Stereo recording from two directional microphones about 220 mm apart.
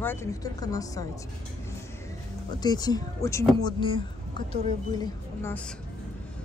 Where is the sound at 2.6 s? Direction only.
20° left (ahead or behind).